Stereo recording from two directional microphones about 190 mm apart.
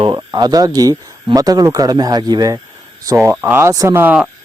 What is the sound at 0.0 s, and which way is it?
Speech, 20° right (ahead or behind).